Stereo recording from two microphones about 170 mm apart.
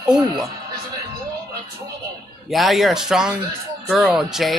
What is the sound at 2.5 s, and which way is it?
Speech, centre (ahead or behind).